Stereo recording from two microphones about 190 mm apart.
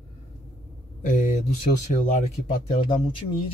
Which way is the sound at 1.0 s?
40° left (ahead or behind).